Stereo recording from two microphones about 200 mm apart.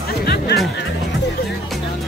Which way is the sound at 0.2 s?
50° left (ahead or behind).